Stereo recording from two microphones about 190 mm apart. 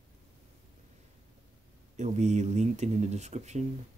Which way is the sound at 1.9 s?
40° right (ahead or behind).